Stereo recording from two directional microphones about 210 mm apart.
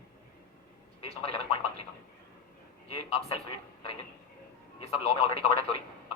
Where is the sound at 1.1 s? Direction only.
30° left (ahead or behind).